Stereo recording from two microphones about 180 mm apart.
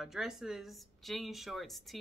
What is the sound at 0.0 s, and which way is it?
Speech, centre (ahead or behind).